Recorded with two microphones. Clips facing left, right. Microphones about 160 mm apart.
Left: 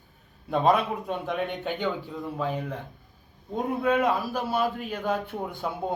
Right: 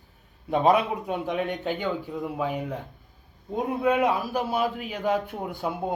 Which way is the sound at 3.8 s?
10° right (ahead or behind).